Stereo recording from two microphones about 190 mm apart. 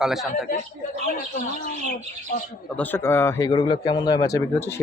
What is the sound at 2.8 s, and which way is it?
Speech, 10° left (ahead or behind).